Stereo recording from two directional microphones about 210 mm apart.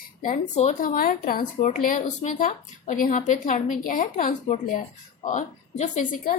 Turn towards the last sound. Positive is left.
turn(degrees=35)  # may be behind; listen again after turning